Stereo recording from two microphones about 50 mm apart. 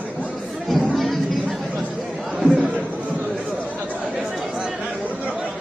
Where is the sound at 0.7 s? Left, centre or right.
Centre.